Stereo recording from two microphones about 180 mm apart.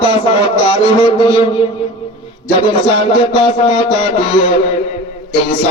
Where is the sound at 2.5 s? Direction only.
25° left (ahead or behind).